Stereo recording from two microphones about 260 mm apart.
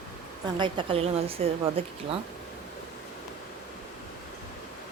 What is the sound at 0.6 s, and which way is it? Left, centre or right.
A woman's voice, centre.